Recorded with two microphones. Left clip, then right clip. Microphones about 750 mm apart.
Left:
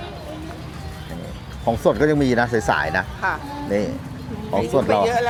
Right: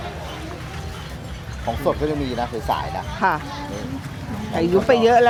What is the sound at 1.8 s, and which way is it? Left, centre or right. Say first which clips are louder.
Speech: left 5 dB; left.